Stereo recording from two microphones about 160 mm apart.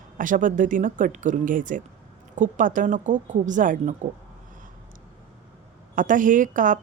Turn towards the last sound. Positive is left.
turn(degrees=-55)  # may be behind; listen again after turning